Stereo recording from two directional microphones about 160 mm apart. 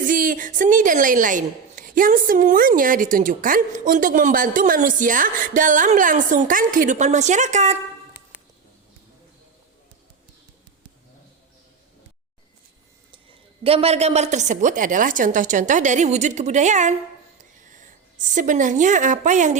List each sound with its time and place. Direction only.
0.0 s a woman's voice: 60° right (ahead or behind)
13.7 s a woman's voice: 40° right (ahead or behind)